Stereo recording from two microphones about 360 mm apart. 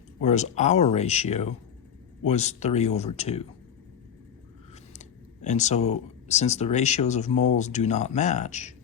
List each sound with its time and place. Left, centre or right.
0.2 s speech: centre
4.9 s speech: centre